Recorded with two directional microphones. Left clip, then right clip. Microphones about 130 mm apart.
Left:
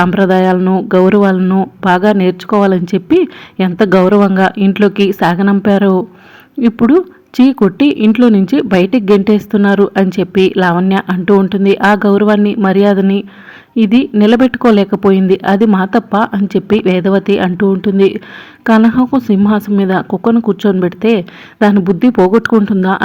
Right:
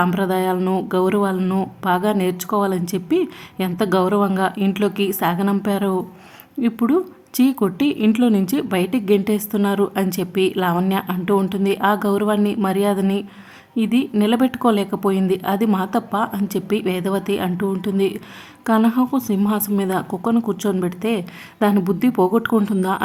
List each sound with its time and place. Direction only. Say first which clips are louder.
0.0 s a woman's voice: left 9 dB; 30° left (ahead or behind)
0.6 s speech: left 7 dB; 15° left (ahead or behind)
0.9 s a woman's voice: left 11 dB; 35° left (ahead or behind)
1.4 s speech: left 9 dB; 15° left (ahead or behind)
1.8 s a woman's voice: left 9 dB; 30° left (ahead or behind)